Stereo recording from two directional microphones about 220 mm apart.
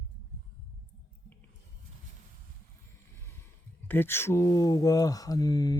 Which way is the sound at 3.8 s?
10° left (ahead or behind).